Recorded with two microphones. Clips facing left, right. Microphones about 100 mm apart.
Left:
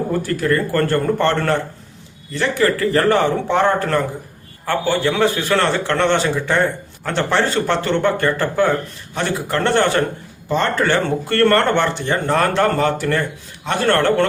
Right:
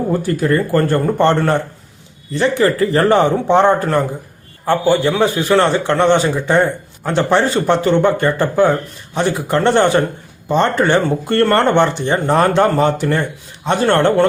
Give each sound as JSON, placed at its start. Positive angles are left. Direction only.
{"t": 0.1, "sound": "a man's voice", "side_deg": -20}